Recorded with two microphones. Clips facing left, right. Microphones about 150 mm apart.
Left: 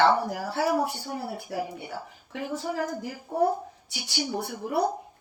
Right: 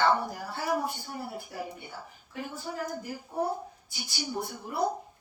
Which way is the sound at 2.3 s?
90° left.